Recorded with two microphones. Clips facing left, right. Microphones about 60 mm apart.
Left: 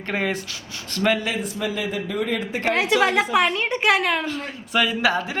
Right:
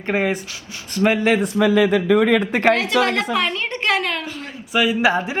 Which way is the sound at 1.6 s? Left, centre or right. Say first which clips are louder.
Right 12 dB; right.